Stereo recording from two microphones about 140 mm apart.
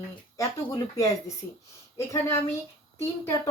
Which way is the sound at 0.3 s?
25° left (ahead or behind).